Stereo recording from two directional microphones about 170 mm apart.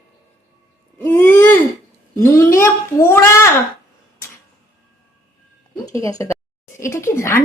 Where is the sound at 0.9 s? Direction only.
10° left (ahead or behind).